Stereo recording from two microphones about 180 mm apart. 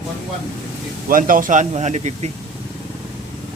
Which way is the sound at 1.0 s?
50° right (ahead or behind).